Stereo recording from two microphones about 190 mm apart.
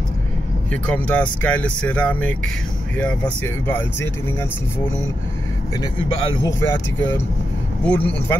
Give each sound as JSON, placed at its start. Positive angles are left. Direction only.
{"t": 0.7, "sound": "speech", "side_deg": 5}
{"t": 5.8, "sound": "speech", "side_deg": 25}
{"t": 6.6, "sound": "speech", "side_deg": 10}